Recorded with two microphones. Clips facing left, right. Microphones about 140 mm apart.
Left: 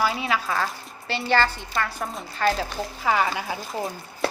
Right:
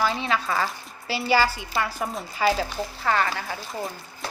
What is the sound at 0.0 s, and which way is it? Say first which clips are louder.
A woman's voice: even; 5° left (ahead or behind).